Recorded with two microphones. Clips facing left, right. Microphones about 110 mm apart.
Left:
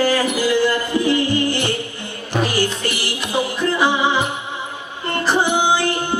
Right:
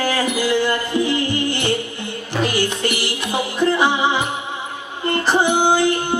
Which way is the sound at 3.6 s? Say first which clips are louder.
Right 2 dB; 20° right (ahead or behind).